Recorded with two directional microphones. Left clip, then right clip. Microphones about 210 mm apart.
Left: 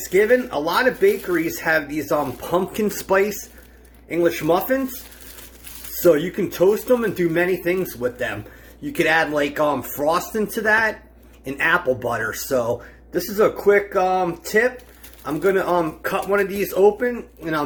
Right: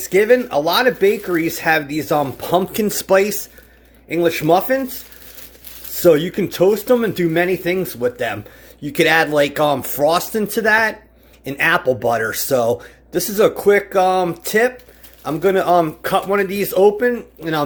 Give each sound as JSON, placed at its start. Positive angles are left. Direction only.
{"t": 0.1, "sound": "speech", "side_deg": -50}
{"t": 6.0, "sound": "speech", "side_deg": -50}